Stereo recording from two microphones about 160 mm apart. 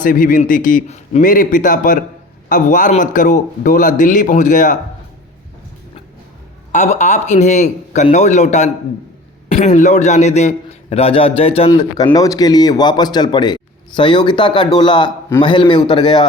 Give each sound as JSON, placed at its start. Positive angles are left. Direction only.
{"t": 0.0, "sound": "a man's voice", "side_deg": 60}
{"t": 6.7, "sound": "a man's voice", "side_deg": 45}